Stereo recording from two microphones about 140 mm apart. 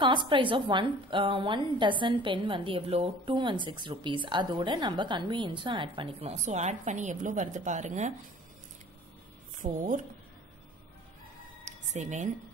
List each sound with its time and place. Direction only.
0.0 s a woman's voice: 35° right (ahead or behind)
6.3 s a woman's voice: 55° right (ahead or behind)
9.6 s a woman's voice: 65° right (ahead or behind)
11.6 s a sound: 55° right (ahead or behind)